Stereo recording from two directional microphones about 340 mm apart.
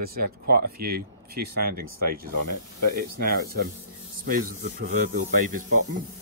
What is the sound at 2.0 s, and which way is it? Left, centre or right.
Snake, right.